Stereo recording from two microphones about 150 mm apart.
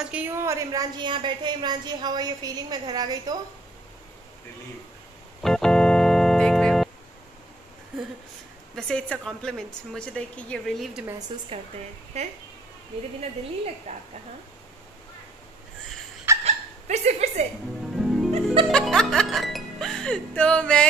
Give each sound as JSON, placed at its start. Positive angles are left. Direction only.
{"t": 0.0, "sound": "a woman's voice", "side_deg": -10}
{"t": 5.4, "sound": "keyboard", "side_deg": 5}
{"t": 8.7, "sound": "a woman's voice", "side_deg": 5}
{"t": 12.1, "sound": "speech", "side_deg": -45}
{"t": 13.9, "sound": "a woman's voice", "side_deg": -40}
{"t": 16.4, "sound": "hiccup", "side_deg": -50}
{"t": 17.9, "sound": "music", "side_deg": 0}
{"t": 18.3, "sound": "music", "side_deg": -40}
{"t": 18.7, "sound": "speech", "side_deg": 5}